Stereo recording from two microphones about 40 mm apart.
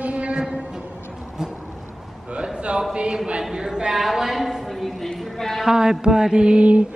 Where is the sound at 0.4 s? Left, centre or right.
Centre.